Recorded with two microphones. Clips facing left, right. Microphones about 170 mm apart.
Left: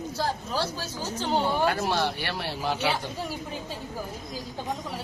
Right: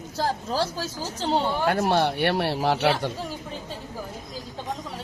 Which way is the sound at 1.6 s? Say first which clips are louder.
Right 4 dB; 55° right (ahead or behind).